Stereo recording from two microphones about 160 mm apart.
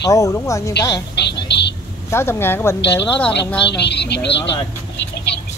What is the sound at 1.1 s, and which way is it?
Speech, 90° left.